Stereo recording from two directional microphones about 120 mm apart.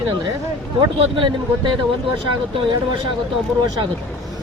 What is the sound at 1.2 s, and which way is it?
Speech, 40° right (ahead or behind).